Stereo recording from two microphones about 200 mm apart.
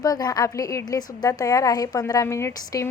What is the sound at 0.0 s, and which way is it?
A woman's voice, 20° left (ahead or behind).